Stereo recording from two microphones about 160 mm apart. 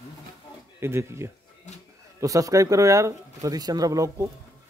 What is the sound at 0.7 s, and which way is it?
A man's voice, 15° right (ahead or behind).